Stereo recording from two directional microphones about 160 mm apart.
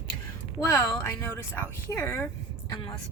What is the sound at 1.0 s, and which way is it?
Speech, 15° left (ahead or behind).